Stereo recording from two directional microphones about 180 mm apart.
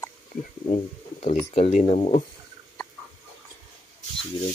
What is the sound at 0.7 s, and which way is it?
Speech, 40° left (ahead or behind).